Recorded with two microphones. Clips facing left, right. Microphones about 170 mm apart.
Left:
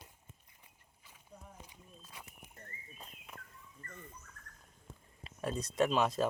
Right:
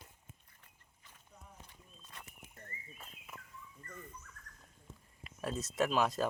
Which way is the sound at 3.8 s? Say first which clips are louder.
Right 1 dB; 55° left (ahead or behind).